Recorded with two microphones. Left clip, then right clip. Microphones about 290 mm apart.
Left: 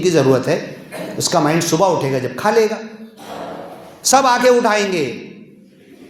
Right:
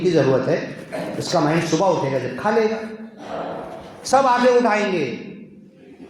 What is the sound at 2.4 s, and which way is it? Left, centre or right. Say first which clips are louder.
Speech: left 5 dB; left.